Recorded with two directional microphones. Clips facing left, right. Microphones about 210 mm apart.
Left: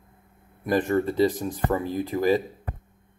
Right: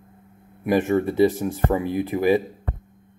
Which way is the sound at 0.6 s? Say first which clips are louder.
Right 3 dB; 15° right (ahead or behind).